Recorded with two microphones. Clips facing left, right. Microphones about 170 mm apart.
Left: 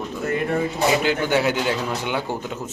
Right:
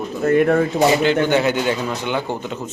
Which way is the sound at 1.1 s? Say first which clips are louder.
Right 4 dB; 5° left (ahead or behind).